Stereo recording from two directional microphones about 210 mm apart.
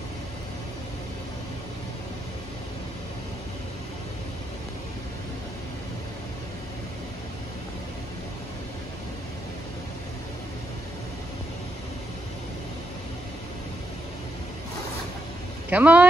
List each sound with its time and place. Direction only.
15.7 s speech: 5° right (ahead or behind)